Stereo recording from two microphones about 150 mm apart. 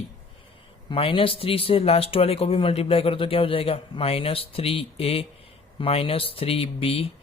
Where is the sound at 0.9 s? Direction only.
35° left (ahead or behind).